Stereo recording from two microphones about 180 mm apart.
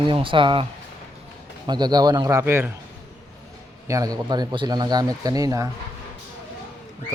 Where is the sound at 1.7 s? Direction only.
20° right (ahead or behind).